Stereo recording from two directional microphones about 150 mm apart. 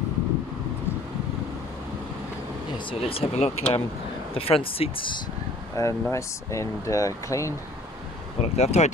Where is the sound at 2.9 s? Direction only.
40° left (ahead or behind).